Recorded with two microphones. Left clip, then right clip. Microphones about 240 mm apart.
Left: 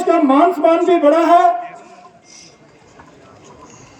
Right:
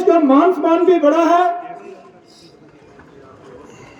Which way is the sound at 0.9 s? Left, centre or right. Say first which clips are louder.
Left 1 dB; left.